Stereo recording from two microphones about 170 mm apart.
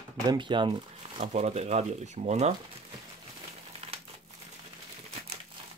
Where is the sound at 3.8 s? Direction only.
35° right (ahead or behind).